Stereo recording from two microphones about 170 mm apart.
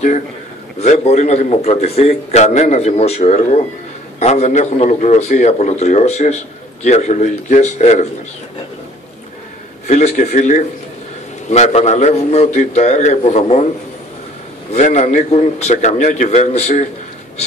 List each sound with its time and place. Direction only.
0.7 s a man's voice: 40° left (ahead or behind)
9.8 s a man's voice: 45° left (ahead or behind)
14.7 s a man's voice: 40° left (ahead or behind)